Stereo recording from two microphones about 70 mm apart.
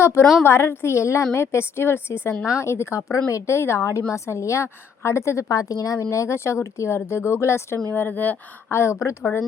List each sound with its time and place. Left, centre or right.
0.0 s a woman's voice: left
6.1 s a woman's voice: left
7.9 s a woman's voice: left